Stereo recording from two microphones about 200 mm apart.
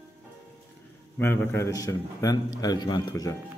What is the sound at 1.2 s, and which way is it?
A man's voice, 10° left (ahead or behind).